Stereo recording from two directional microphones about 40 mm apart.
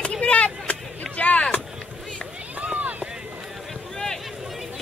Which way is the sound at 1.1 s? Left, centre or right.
Left.